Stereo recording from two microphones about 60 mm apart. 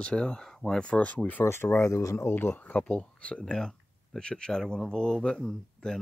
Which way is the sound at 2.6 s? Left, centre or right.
Left.